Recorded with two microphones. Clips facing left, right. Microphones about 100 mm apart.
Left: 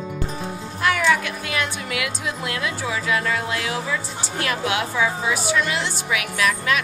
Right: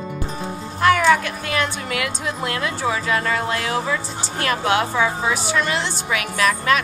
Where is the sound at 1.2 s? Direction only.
5° left (ahead or behind).